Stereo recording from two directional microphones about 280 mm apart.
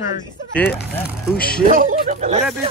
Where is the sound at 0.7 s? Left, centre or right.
Centre.